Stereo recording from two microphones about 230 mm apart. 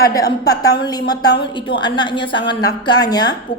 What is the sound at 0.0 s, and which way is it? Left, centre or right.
A woman's voice, centre.